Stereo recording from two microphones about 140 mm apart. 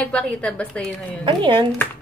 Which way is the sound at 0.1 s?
5° left (ahead or behind).